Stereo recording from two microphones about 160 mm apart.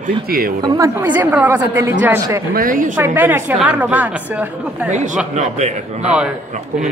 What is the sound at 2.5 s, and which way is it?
Speech, 60° right (ahead or behind).